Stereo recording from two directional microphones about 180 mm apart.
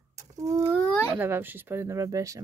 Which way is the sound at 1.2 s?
10° right (ahead or behind).